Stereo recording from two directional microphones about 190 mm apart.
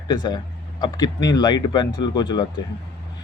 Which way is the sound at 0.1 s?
20° left (ahead or behind).